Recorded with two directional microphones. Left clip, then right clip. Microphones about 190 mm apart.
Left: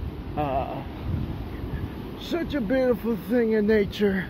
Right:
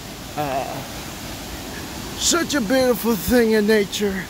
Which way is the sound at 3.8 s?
10° right (ahead or behind).